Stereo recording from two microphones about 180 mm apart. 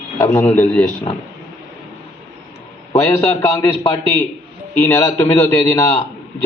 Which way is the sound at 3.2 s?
15° left (ahead or behind).